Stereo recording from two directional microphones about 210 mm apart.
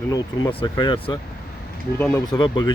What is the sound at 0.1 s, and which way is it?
Speech, 20° left (ahead or behind).